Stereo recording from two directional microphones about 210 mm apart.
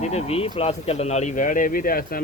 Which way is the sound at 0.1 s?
30° left (ahead or behind).